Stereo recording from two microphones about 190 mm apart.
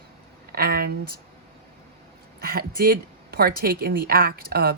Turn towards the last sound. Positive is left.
turn(degrees=-55)  # may be behind; listen again after turning